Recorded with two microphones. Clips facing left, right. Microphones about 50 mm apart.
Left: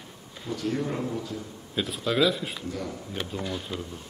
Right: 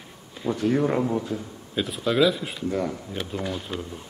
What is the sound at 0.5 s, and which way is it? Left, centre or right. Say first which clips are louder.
Speech: right 6 dB; right.